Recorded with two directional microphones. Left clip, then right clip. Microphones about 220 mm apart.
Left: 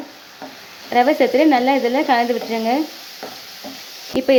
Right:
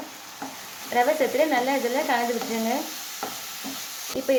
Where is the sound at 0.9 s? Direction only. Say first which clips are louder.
Left 7 dB; 40° left (ahead or behind).